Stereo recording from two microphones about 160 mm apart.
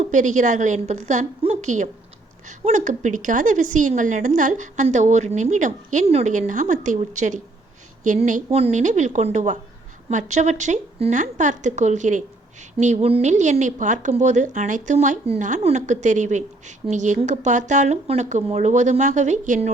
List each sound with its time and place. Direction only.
0.0 s a woman's voice: 50° right (ahead or behind)